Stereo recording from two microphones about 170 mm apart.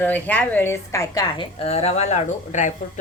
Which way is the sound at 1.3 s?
35° left (ahead or behind).